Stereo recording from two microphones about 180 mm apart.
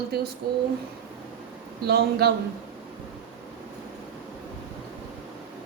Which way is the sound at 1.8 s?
60° right (ahead or behind).